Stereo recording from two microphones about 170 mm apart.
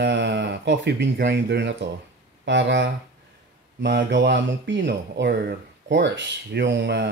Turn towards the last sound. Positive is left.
turn(degrees=-85)